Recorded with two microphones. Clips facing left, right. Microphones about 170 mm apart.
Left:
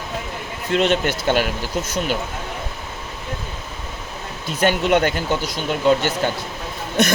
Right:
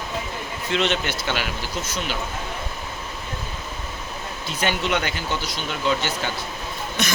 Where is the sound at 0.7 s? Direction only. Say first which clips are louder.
Left 5 dB; 50° left (ahead or behind).